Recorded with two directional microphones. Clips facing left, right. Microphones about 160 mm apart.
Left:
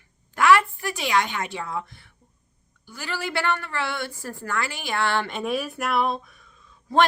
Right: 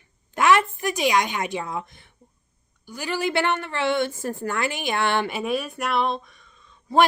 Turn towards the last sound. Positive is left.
turn(degrees=0)  # may be behind; listen again after turning